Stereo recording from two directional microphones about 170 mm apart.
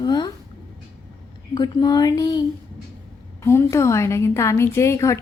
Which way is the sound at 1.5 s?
25° left (ahead or behind).